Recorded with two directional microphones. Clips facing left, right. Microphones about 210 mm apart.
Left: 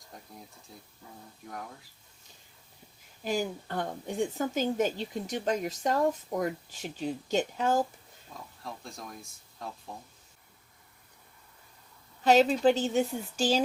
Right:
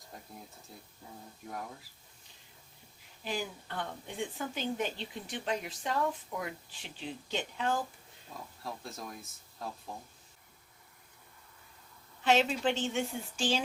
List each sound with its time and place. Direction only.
0.7 s speech: centre (ahead or behind)
3.2 s a woman's voice: 45° left (ahead or behind)
8.3 s speech: centre (ahead or behind)
12.2 s a woman's voice: 40° left (ahead or behind)